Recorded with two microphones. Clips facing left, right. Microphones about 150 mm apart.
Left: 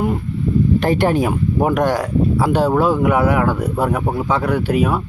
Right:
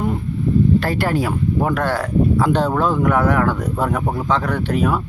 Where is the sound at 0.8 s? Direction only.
20° left (ahead or behind).